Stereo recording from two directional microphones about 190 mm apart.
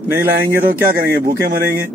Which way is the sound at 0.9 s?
50° right (ahead or behind).